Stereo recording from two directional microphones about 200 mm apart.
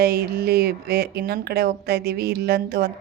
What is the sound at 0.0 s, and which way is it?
Speech, 50° right (ahead or behind).